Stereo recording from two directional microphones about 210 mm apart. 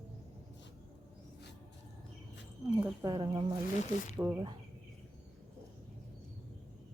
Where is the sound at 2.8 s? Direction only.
20° right (ahead or behind).